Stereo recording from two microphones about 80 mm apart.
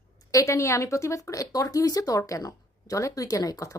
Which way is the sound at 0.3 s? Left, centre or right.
Left.